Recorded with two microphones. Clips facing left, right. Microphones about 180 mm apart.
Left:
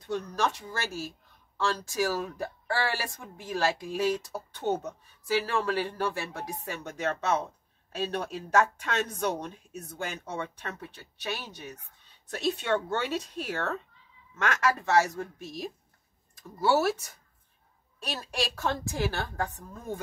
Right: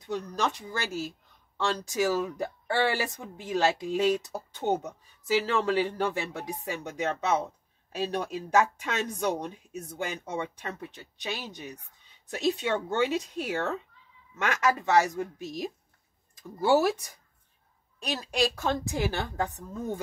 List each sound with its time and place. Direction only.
0.0 s speech: 15° right (ahead or behind)